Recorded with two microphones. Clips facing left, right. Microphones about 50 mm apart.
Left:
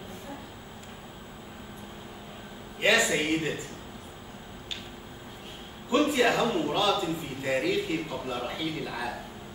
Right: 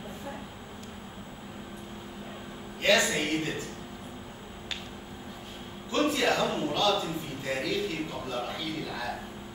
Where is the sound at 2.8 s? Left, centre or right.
Centre.